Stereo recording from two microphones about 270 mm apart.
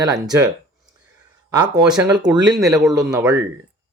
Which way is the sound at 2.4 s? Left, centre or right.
Centre.